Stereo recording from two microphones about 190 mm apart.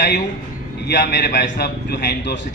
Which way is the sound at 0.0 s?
45° left (ahead or behind).